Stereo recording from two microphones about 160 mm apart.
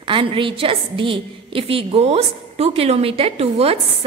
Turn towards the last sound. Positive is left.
turn(degrees=-40)  # may be behind; listen again after turning